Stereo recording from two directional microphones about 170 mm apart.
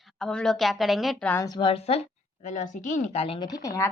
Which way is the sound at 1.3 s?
20° left (ahead or behind).